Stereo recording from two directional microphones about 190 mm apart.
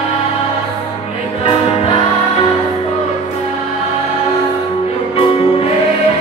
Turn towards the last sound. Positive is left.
turn(degrees=30)  # may be behind; listen again after turning